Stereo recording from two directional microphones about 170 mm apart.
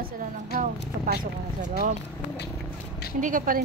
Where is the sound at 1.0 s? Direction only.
55° right (ahead or behind).